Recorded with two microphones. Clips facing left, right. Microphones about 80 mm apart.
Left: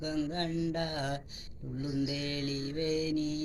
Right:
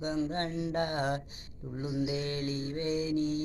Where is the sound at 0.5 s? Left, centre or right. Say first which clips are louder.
Right 1 dB; right.